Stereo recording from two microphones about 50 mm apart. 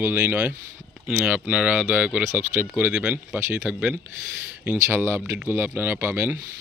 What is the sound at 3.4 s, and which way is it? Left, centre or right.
Speech, right.